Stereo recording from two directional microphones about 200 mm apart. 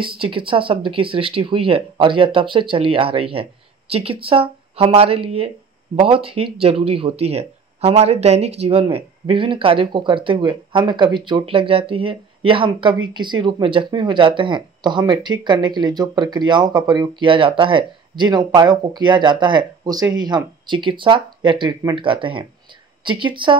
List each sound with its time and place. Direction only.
0.0 s speech: 25° right (ahead or behind)